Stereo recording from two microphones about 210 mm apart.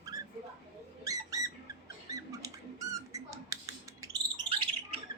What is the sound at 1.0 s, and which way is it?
Bird, 15° right (ahead or behind).